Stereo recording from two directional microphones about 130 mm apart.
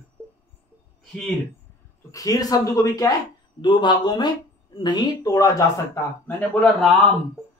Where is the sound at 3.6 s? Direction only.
35° left (ahead or behind); by 6.7 s 15° left (ahead or behind).